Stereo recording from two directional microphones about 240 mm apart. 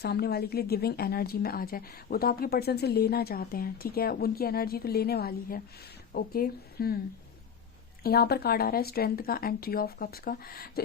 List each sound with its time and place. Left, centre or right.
0.0 s a woman's voice: left
8.0 s a woman's voice: left